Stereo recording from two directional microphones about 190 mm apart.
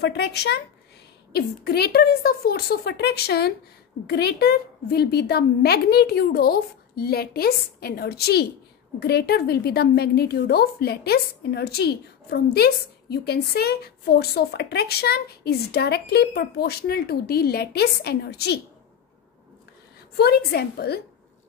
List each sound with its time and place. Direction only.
0.0 s a woman's voice: 60° left (ahead or behind)
20.2 s a woman's voice: 55° left (ahead or behind)